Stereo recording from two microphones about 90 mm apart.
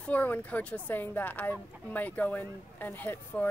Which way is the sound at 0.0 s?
20° left (ahead or behind).